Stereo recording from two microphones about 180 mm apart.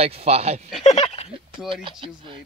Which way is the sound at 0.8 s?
35° left (ahead or behind).